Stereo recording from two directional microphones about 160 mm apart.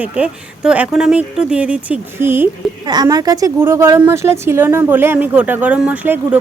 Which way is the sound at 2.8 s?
25° right (ahead or behind).